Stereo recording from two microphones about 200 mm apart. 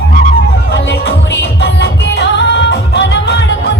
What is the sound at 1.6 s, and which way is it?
Music, 60° left (ahead or behind).